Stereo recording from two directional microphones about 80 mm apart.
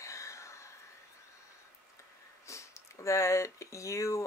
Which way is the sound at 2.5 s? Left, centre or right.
Left.